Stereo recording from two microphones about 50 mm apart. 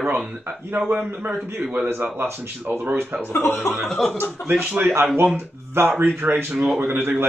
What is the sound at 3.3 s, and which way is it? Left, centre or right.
Speech, left.